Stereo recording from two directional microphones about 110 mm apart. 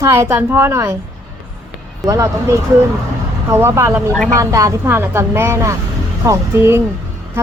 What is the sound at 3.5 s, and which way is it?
A woman's voice, 25° right (ahead or behind).